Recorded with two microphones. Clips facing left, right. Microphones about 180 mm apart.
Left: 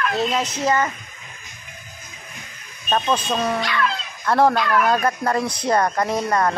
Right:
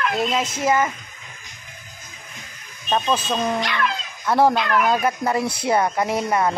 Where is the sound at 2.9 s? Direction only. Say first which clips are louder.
Even; 5° right (ahead or behind).